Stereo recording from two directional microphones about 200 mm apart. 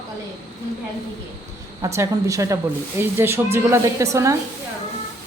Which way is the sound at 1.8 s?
15° right (ahead or behind).